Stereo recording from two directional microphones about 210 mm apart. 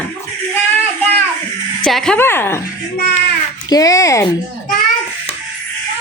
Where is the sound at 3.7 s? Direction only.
15° left (ahead or behind).